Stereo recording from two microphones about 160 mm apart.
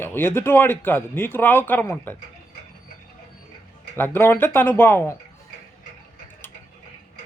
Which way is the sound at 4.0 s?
15° left (ahead or behind).